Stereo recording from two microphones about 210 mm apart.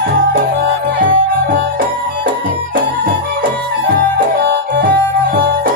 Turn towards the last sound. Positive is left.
turn(degrees=-45)  # may be behind; listen again after turning